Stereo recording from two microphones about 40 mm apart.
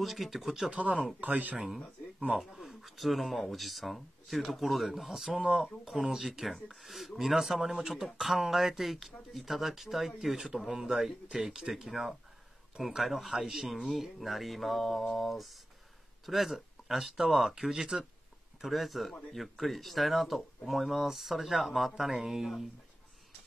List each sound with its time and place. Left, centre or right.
0.0 s speech: centre
0.7 s speech: right
1.2 s speech: right
2.3 s speech: centre
18.7 s speech: centre